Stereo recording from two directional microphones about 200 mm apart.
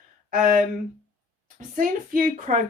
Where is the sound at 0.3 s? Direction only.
45° right (ahead or behind).